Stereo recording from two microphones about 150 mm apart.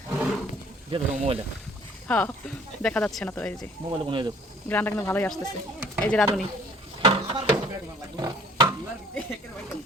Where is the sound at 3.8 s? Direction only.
30° right (ahead or behind).